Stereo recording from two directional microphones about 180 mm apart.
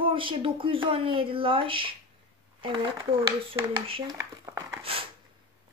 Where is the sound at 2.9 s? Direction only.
15° right (ahead or behind).